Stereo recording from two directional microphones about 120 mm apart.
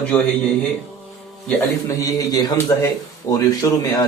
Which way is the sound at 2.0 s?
30° left (ahead or behind).